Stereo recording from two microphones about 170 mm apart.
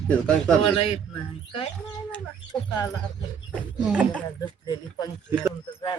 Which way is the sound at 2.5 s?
20° left (ahead or behind).